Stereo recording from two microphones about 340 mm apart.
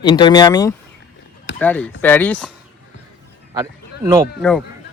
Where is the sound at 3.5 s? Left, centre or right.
Centre.